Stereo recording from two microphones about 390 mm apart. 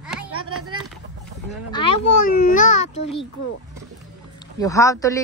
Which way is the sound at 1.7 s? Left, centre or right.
Centre.